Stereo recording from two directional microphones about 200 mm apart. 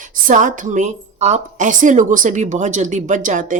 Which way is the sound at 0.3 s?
40° right (ahead or behind).